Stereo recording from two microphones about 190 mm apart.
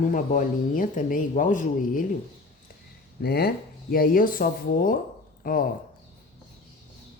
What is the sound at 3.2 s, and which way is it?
Speech, 55° left (ahead or behind).